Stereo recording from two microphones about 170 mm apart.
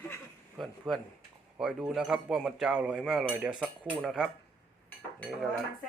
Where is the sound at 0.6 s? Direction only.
Centre (ahead or behind).